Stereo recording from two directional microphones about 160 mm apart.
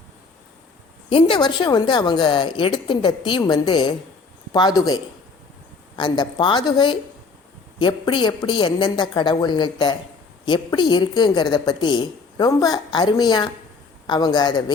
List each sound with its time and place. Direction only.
1.1 s a woman's voice: 30° left (ahead or behind)
6.0 s a woman's voice: 30° left (ahead or behind)